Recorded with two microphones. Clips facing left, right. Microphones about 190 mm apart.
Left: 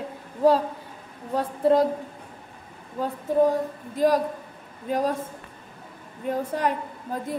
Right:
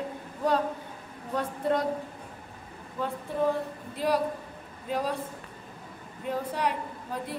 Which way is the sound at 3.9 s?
45° left (ahead or behind).